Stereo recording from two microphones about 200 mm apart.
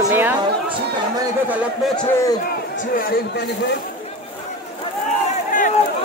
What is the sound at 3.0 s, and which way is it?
Speech, 50° left (ahead or behind).